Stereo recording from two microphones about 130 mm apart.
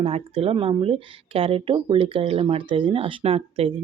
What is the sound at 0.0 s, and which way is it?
Speech, 50° right (ahead or behind).